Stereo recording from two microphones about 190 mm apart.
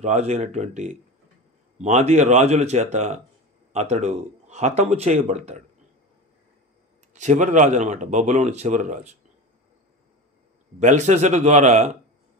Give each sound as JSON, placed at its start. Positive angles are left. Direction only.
{"t": 0.0, "sound": "speech", "side_deg": -35}
{"t": 7.2, "sound": "speech", "side_deg": -40}
{"t": 10.8, "sound": "speech", "side_deg": -40}